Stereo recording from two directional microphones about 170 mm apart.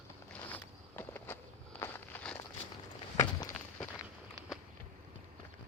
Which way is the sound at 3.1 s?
25° left (ahead or behind).